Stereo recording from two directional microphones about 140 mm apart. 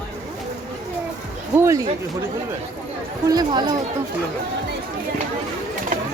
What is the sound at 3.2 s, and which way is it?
Speech, 30° right (ahead or behind).